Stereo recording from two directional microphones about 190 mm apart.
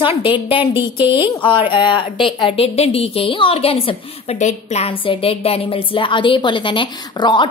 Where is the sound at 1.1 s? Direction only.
25° left (ahead or behind).